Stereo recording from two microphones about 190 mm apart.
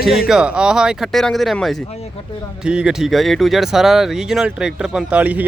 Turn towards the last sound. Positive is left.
turn(degrees=-5)  # may be behind; listen again after turning